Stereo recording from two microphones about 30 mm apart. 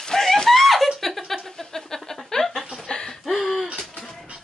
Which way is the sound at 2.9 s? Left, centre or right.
Left.